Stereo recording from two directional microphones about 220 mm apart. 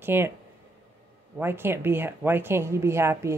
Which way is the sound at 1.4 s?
10° right (ahead or behind).